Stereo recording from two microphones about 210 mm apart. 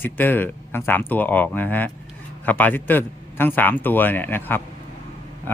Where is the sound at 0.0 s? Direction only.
10° left (ahead or behind).